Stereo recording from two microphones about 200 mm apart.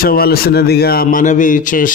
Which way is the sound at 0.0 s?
50° left (ahead or behind).